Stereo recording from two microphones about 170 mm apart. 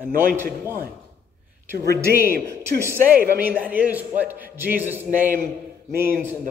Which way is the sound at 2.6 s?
15° right (ahead or behind).